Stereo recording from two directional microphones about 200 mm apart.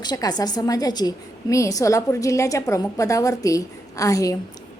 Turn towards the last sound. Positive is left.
turn(degrees=15)  # may be behind; listen again after turning